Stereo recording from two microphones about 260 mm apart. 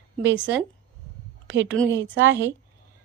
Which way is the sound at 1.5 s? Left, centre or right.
Right.